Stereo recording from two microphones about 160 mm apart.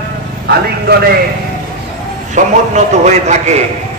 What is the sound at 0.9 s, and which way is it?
Speech, 80° right.